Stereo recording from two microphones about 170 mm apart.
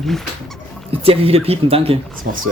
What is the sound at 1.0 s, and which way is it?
Speech, 35° right (ahead or behind).